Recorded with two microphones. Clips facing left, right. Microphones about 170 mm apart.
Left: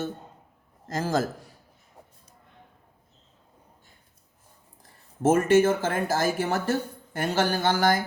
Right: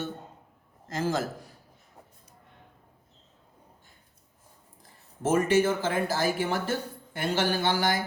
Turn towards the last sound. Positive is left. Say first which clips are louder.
# left 3 dB
turn(degrees=45)  # may be behind; listen again after turning